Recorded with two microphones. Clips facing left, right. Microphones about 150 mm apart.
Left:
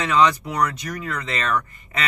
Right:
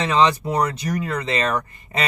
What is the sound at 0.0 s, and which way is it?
Speech, 30° right (ahead or behind).